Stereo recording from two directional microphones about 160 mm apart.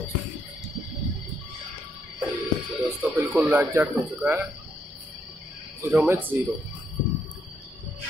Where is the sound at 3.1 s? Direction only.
10° right (ahead or behind).